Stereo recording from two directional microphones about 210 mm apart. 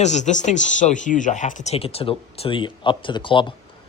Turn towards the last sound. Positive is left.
turn(degrees=25)  # may be behind; listen again after turning